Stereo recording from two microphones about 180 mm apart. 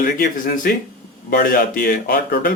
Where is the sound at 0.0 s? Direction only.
50° left (ahead or behind).